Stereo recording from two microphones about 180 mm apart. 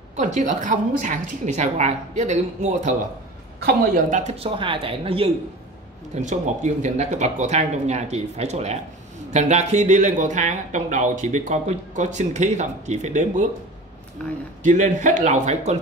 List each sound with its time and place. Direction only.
0.1 s speech: 45° right (ahead or behind)
3.5 s speech: 60° right (ahead or behind); by 5.3 s 30° right (ahead or behind)
6.1 s speech: 40° right (ahead or behind)
14.2 s speech: 5° left (ahead or behind)
14.6 s speech: 45° right (ahead or behind)